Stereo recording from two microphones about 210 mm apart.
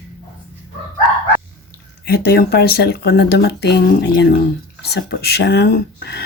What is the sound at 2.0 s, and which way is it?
Speech, 50° left (ahead or behind).